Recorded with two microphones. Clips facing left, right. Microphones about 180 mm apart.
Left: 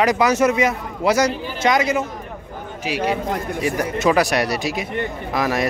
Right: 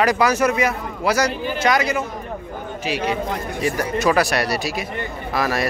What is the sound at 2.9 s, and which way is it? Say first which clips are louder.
Speech: left 2 dB; 10° left (ahead or behind).